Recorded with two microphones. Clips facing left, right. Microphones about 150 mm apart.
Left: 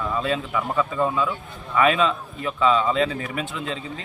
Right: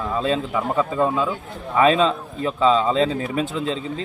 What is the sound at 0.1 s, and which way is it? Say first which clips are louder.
A man's voice: right 5 dB; 30° right (ahead or behind).